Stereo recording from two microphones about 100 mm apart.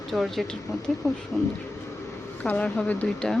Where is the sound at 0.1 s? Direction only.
Centre (ahead or behind).